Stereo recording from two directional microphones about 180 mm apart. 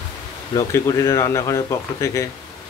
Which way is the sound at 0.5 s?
15° left (ahead or behind).